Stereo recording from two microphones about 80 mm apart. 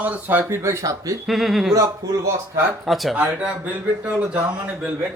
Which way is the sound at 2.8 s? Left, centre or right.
Centre.